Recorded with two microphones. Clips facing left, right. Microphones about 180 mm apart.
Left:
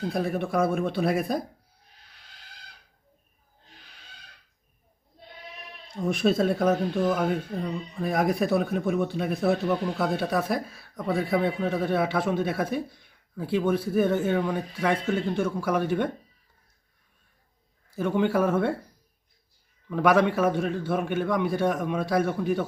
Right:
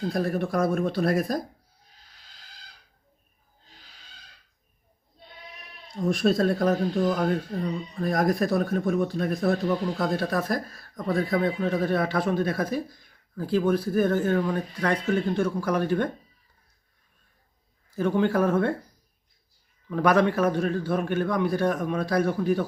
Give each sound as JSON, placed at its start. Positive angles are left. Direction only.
{"t": 0.1, "sound": "speech", "side_deg": 5}
{"t": 6.1, "sound": "speech", "side_deg": 5}
{"t": 17.9, "sound": "speech", "side_deg": 5}
{"t": 19.9, "sound": "speech", "side_deg": 5}